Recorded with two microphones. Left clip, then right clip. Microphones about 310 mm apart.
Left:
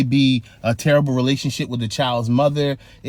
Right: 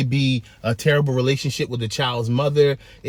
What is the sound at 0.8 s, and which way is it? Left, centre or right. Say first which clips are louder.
Speech: left 2 dB; left.